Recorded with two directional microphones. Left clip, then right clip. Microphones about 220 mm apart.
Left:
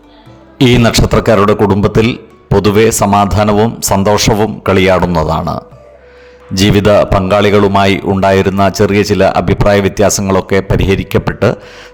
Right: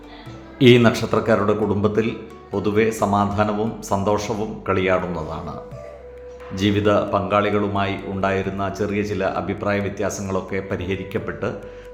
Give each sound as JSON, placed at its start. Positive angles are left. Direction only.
{"t": 0.6, "sound": "a man's voice", "side_deg": 50}